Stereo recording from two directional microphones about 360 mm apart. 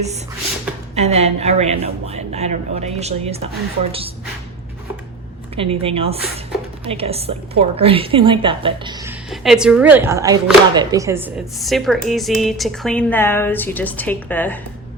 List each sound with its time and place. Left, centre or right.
0.9 s a man's voice: centre
5.5 s a man's voice: centre